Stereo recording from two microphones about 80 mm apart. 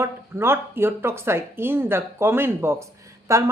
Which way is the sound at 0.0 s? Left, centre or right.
Right.